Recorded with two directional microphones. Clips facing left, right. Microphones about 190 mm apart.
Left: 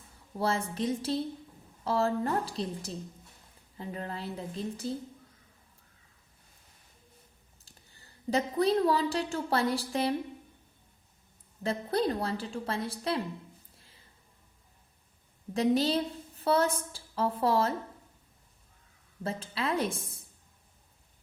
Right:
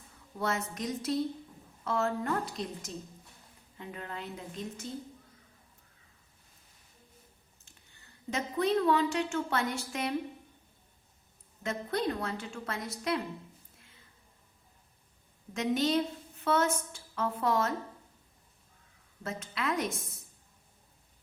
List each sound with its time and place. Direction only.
0.3 s a woman's voice: 30° left (ahead or behind)
7.6 s a woman's voice: 35° left (ahead or behind)
11.6 s a woman's voice: 35° left (ahead or behind)
13.7 s insect: 30° left (ahead or behind)
15.5 s a woman's voice: 35° left (ahead or behind)
19.2 s a woman's voice: 30° left (ahead or behind)